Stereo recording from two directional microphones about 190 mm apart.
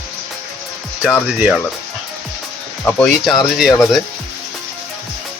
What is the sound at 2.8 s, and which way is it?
Speech, 10° left (ahead or behind).